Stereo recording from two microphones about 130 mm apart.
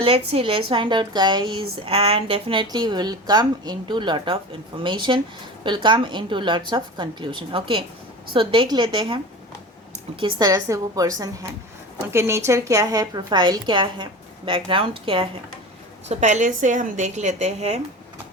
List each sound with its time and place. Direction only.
0.0 s a woman's voice: 50° right (ahead or behind); by 11.1 s 25° right (ahead or behind)
12.1 s speech: 20° right (ahead or behind); by 15.3 s 45° right (ahead or behind)
16.0 s a woman's voice: 65° right (ahead or behind)